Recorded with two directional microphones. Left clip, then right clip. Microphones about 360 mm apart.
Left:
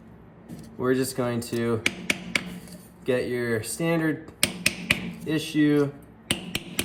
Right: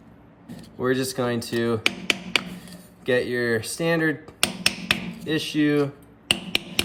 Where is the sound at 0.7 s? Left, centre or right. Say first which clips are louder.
Right 1 dB; centre.